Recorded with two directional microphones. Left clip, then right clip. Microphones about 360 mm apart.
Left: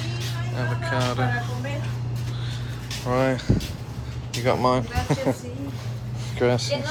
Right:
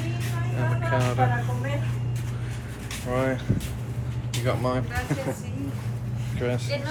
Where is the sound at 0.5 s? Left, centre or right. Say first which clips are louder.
Even; centre.